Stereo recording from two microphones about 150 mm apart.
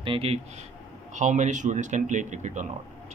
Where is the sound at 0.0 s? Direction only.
40° right (ahead or behind).